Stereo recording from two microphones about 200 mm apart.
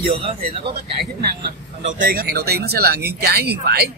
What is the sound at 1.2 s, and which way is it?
Speech, 50° right (ahead or behind).